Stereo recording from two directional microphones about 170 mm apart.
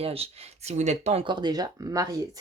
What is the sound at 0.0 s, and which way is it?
Speech, 35° right (ahead or behind).